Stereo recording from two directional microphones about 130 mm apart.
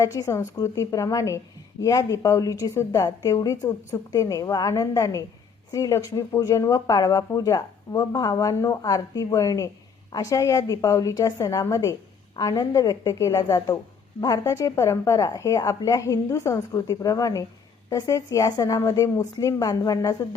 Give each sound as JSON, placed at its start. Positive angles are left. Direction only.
{"t": 0.0, "sound": "speech", "side_deg": 25}